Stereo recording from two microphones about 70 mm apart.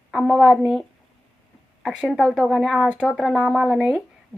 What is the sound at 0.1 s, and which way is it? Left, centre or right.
Speech, centre.